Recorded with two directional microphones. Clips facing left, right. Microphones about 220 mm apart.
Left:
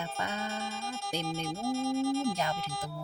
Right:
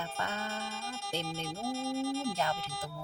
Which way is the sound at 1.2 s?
45° left (ahead or behind).